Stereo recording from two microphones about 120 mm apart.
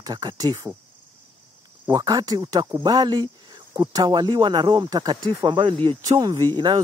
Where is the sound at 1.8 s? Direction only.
30° right (ahead or behind).